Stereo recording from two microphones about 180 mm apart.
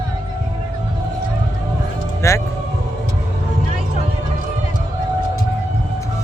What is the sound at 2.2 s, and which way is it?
Speech, 15° left (ahead or behind).